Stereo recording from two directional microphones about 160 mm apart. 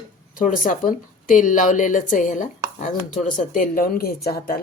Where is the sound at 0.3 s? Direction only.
55° left (ahead or behind).